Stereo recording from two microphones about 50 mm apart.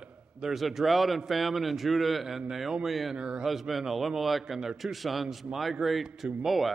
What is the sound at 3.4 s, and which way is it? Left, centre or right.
A man's voice, centre.